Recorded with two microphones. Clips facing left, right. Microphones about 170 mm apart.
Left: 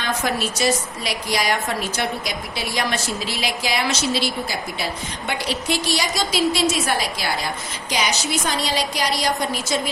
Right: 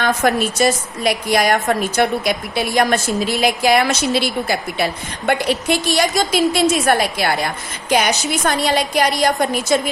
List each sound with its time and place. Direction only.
0.0 s a woman's voice: 55° right (ahead or behind)